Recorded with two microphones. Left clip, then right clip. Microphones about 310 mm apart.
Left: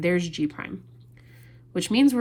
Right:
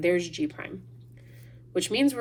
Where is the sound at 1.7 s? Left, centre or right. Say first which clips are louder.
Left 3 dB; centre.